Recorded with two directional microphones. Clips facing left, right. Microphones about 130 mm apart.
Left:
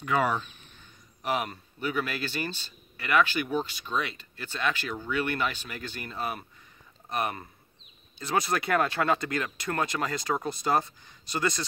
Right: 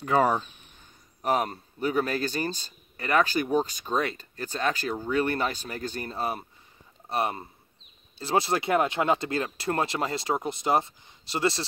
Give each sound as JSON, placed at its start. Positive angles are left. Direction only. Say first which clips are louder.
{"t": 0.0, "sound": "speech", "louder": "right 4 dB", "side_deg": -35}